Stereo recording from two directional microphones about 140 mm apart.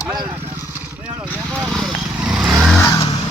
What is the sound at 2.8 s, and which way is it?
Vehicle, 25° left (ahead or behind).